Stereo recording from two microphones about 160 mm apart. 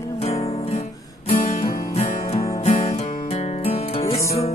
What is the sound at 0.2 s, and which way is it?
Music, 40° left (ahead or behind).